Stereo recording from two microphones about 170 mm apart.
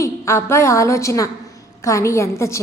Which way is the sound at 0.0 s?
15° left (ahead or behind).